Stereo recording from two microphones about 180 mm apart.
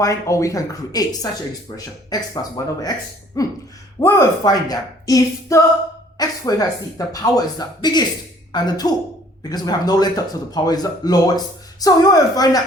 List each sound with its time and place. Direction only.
0.0 s speech: 15° left (ahead or behind)